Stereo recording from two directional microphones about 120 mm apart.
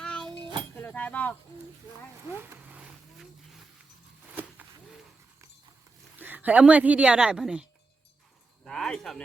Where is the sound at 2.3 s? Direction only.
15° right (ahead or behind).